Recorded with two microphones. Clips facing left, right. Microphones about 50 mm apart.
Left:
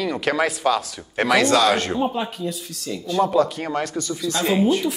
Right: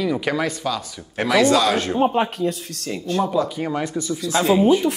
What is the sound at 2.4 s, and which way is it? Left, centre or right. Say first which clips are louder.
Speech: right 5 dB; right.